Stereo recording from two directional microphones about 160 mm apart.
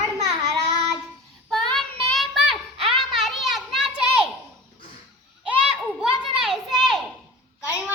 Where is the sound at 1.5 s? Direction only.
Centre (ahead or behind).